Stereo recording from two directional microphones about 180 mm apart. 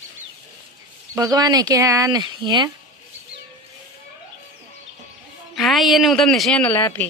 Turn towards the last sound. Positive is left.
turn(degrees=10)  # may be behind; listen again after turning